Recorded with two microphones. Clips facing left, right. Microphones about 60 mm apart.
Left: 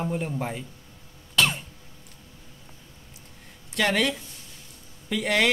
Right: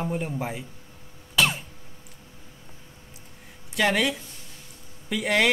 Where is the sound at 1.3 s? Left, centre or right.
Centre.